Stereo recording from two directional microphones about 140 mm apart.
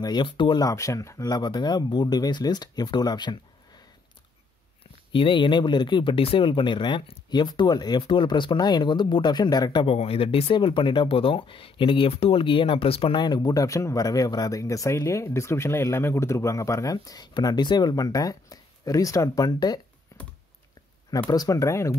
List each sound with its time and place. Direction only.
0.0 s speech: 35° left (ahead or behind)
5.1 s speech: 35° left (ahead or behind)
9.8 s speech: 45° left (ahead or behind)
21.3 s speech: 25° left (ahead or behind)